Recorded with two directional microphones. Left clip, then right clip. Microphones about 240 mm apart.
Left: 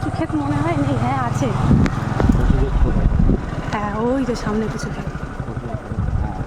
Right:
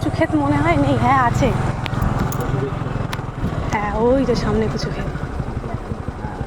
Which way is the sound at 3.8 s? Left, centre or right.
Centre.